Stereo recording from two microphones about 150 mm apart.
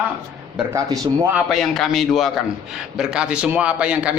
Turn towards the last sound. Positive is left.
turn(degrees=-10)  # may be behind; listen again after turning